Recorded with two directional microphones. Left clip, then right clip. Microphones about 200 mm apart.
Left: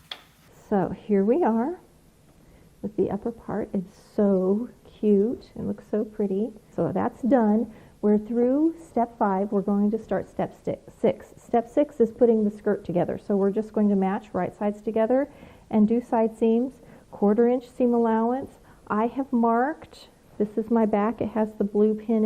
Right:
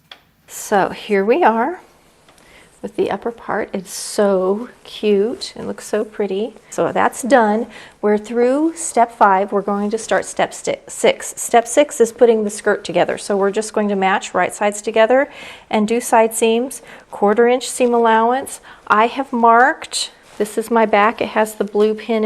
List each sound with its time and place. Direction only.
0.1 s speech: 5° right (ahead or behind)
2.9 s a woman's voice: 10° right (ahead or behind)
4.4 s speech: 25° right (ahead or behind)
4.9 s a woman's voice: 10° right (ahead or behind)
9.0 s speech: 15° right (ahead or behind)
9.9 s a woman's voice: 10° right (ahead or behind)
17.1 s speech: 25° right (ahead or behind)
17.3 s a woman's voice: 10° right (ahead or behind)